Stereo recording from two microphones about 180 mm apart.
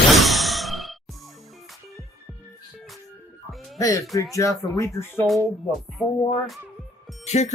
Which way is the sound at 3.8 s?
20° left (ahead or behind).